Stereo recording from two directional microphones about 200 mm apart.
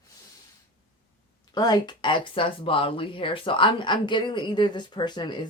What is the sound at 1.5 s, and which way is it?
Speech, 20° left (ahead or behind).